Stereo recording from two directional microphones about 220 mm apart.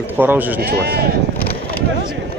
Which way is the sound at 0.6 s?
45° right (ahead or behind).